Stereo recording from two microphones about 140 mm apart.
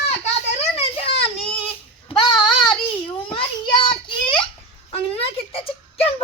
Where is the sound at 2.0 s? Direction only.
35° left (ahead or behind).